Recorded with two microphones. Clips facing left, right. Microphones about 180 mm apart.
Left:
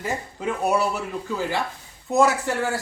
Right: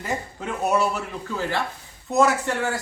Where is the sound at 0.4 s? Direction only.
10° left (ahead or behind).